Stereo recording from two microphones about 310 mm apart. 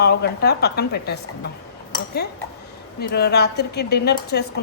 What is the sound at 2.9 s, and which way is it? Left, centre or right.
A woman's voice, left.